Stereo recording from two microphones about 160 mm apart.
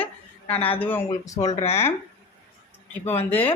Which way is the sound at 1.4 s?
45° left (ahead or behind).